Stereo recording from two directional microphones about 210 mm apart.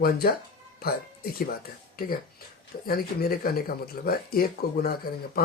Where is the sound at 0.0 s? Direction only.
45° left (ahead or behind).